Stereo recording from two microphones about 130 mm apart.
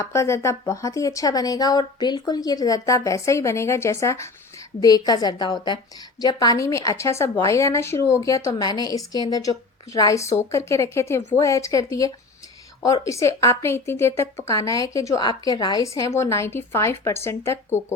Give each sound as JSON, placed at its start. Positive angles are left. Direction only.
{"t": 0.0, "sound": "a woman's voice", "side_deg": 20}